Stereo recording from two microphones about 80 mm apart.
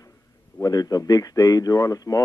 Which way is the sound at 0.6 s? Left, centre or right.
Left.